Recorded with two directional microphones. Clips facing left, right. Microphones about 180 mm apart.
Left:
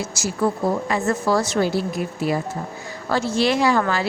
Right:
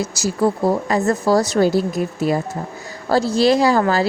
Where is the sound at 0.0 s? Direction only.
35° right (ahead or behind).